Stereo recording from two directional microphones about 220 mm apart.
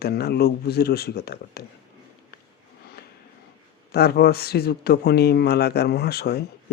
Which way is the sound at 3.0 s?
45° left (ahead or behind).